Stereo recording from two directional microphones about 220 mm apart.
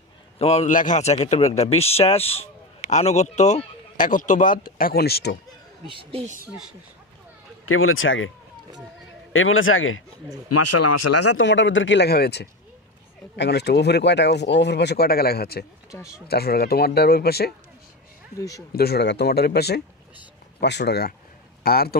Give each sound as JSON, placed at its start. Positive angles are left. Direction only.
{"t": 0.4, "sound": "a man's voice", "side_deg": 30}
{"t": 5.9, "sound": "a woman's voice", "side_deg": -25}
{"t": 7.6, "sound": "speech", "side_deg": 70}
{"t": 9.3, "sound": "a man's voice", "side_deg": 65}
{"t": 10.5, "sound": "speech", "side_deg": 90}
{"t": 11.4, "sound": "speech", "side_deg": 55}
{"t": 15.9, "sound": "speech", "side_deg": 15}
{"t": 16.3, "sound": "speech", "side_deg": 45}
{"t": 18.7, "sound": "speech", "side_deg": 45}